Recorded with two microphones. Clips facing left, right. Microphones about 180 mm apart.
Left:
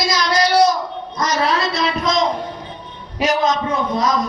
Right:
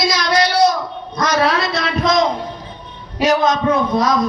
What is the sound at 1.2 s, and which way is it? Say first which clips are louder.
A man's voice: right 2 dB; 60° right (ahead or behind).